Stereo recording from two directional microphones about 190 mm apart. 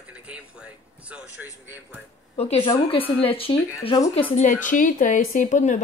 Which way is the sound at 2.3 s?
30° left (ahead or behind).